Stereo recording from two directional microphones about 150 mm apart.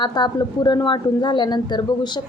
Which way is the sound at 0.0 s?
30° left (ahead or behind).